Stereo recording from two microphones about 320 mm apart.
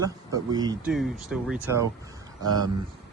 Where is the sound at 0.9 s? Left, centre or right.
Centre.